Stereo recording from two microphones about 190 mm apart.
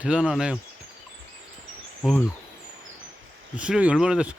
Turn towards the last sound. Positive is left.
turn(degrees=-5)  # may be behind; listen again after turning